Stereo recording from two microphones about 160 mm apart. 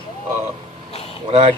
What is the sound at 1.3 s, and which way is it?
Speech, 40° right (ahead or behind).